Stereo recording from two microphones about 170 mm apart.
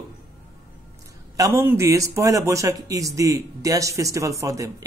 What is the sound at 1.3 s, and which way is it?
A man's voice, 15° right (ahead or behind).